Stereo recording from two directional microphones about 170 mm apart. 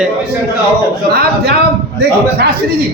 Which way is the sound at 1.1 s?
60° right (ahead or behind).